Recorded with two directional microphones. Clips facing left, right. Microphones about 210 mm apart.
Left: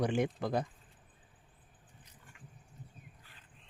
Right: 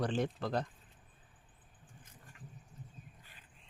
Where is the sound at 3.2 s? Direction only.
15° right (ahead or behind).